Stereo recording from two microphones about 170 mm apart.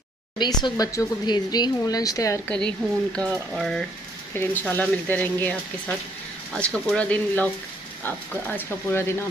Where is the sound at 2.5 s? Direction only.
5° left (ahead or behind).